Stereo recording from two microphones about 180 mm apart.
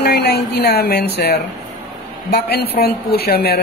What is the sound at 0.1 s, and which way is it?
A woman's voice, 65° left (ahead or behind).